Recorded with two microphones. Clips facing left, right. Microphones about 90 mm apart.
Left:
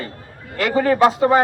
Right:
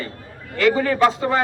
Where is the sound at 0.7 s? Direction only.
35° left (ahead or behind).